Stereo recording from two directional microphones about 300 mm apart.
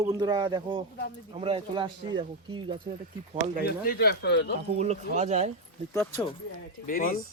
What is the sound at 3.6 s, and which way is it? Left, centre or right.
Speech, left.